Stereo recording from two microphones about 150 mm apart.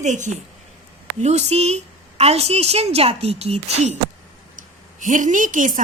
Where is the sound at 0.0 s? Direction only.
55° right (ahead or behind).